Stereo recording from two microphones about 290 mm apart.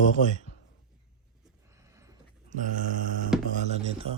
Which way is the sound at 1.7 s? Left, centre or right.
Centre.